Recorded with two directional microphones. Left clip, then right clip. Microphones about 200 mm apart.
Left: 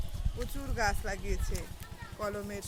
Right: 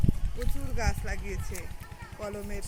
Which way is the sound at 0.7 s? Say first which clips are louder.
Left 3 dB; 20° left (ahead or behind).